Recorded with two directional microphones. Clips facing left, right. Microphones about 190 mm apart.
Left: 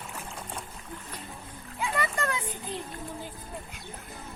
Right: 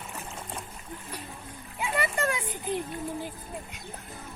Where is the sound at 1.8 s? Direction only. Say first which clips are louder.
Right 2 dB; 15° right (ahead or behind).